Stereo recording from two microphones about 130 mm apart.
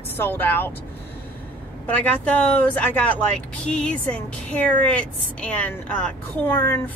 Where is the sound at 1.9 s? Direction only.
10° left (ahead or behind).